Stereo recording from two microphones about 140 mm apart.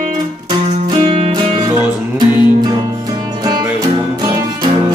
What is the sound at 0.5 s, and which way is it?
Music, 35° right (ahead or behind).